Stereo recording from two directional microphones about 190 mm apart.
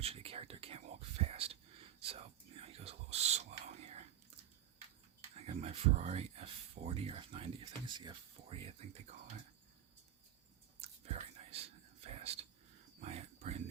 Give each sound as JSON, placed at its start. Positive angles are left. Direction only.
{"t": 0.0, "sound": "speech", "side_deg": -30}
{"t": 2.0, "sound": "whispering", "side_deg": -30}
{"t": 5.5, "sound": "speech", "side_deg": -35}
{"t": 10.8, "sound": "whispering", "side_deg": -30}
{"t": 12.0, "sound": "a sound", "side_deg": -35}